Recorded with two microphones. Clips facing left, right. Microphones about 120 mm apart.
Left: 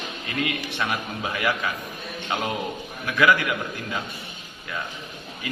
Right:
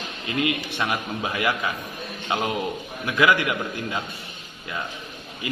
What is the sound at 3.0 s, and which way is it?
Speech, 20° right (ahead or behind).